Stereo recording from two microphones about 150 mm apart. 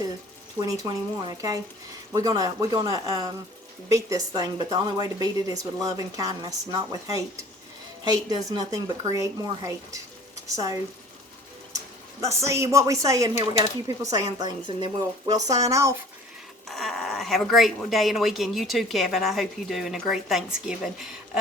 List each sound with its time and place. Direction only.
0.6 s a woman's voice: 25° right (ahead or behind)
12.5 s a woman's voice: 20° right (ahead or behind)
16.6 s speech: centre (ahead or behind)